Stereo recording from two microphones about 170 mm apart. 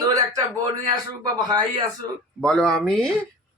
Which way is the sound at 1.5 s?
25° right (ahead or behind).